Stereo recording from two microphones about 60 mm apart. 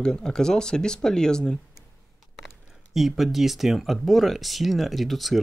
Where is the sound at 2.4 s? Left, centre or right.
Centre.